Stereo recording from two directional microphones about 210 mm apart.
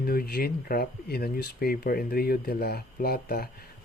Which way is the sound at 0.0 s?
45° left (ahead or behind).